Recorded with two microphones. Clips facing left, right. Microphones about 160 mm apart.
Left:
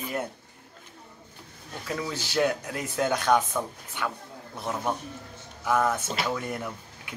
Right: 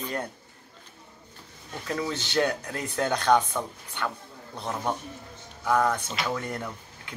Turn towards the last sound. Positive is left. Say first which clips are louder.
# left 1 dB
turn(degrees=10)  # may be behind; listen again after turning